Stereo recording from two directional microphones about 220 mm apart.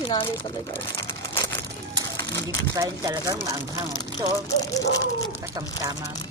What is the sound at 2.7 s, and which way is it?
Speech, 15° right (ahead or behind).